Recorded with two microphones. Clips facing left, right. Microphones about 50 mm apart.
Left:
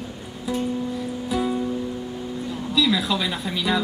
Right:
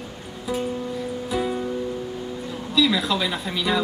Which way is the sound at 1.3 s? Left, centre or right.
Centre.